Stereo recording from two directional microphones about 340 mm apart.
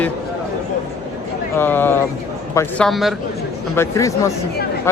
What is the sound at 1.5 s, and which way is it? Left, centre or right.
A man's voice, centre.